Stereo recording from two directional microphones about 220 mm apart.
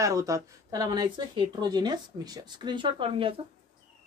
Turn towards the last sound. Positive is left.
turn(degrees=-25)  # may be behind; listen again after turning